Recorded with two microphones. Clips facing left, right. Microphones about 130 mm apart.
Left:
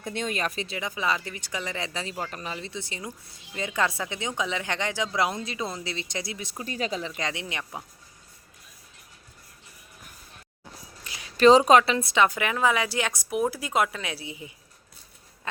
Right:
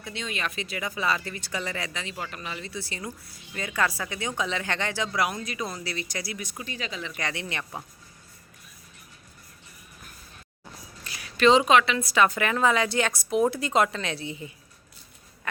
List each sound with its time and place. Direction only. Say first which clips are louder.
0.0 s speech: left 4 dB; 50° left (ahead or behind)
0.8 s a woman's voice: right 1 dB; 20° left (ahead or behind)
1.9 s speech: left 2 dB; 35° left (ahead or behind)
2.7 s a woman's voice: right 1 dB; 20° left (ahead or behind)
6.7 s speech: left 7 dB; 40° left (ahead or behind)
7.1 s a woman's voice: even; 20° left (ahead or behind)
7.6 s a woman's voice: even; 5° left (ahead or behind)
11.0 s a sound: even; 20° left (ahead or behind)
11.3 s a woman's voice: left 3 dB; 35° left (ahead or behind); by 14.5 s 10° left (ahead or behind)